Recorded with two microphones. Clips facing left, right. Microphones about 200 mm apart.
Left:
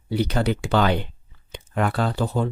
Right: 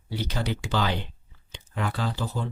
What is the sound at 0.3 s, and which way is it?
Speech, 60° left (ahead or behind).